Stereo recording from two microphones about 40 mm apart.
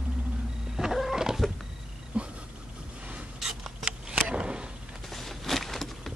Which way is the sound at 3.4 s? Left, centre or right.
Centre.